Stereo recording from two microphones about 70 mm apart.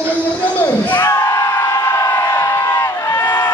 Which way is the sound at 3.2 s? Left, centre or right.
Left.